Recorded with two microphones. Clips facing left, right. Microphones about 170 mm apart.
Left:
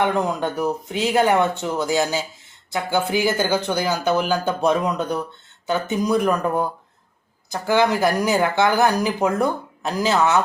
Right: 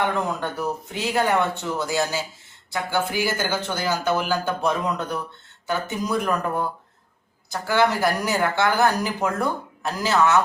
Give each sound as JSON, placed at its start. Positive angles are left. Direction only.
{"t": 0.0, "sound": "speech", "side_deg": 20}